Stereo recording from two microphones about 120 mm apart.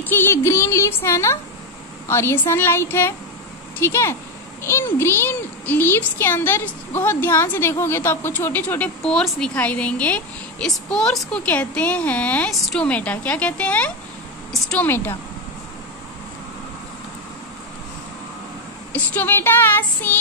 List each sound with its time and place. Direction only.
0.0 s a woman's voice: 15° left (ahead or behind)
18.9 s speech: 15° left (ahead or behind)